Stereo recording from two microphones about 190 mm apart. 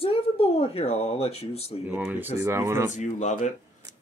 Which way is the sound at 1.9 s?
5° right (ahead or behind).